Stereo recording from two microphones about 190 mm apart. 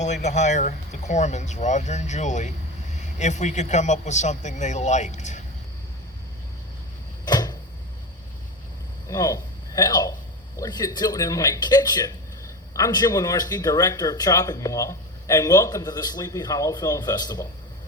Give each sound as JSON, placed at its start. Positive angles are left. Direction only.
{"t": 0.0, "sound": "speech", "side_deg": 40}
{"t": 7.3, "sound": "a sound", "side_deg": 20}
{"t": 9.0, "sound": "speech", "side_deg": 20}